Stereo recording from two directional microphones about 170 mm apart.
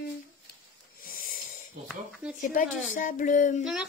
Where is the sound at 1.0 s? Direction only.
55° left (ahead or behind).